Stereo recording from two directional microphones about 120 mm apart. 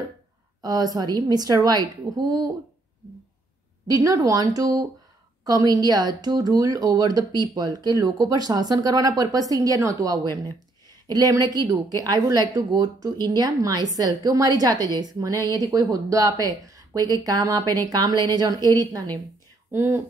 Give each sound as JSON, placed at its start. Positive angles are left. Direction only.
{"t": 0.6, "sound": "speech", "side_deg": -35}
{"t": 3.8, "sound": "speech", "side_deg": -30}
{"t": 19.7, "sound": "speech", "side_deg": -20}